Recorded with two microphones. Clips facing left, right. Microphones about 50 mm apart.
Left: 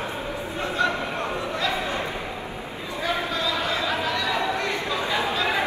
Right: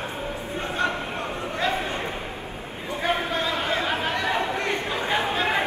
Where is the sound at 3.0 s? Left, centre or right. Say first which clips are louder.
Right 1 dB; right.